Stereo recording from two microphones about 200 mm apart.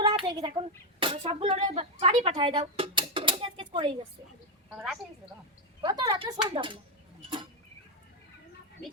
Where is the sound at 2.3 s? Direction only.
20° right (ahead or behind).